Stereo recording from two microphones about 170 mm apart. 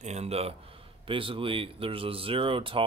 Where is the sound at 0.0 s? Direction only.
40° right (ahead or behind).